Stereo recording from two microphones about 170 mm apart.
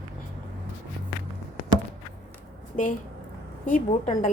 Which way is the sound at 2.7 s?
50° left (ahead or behind).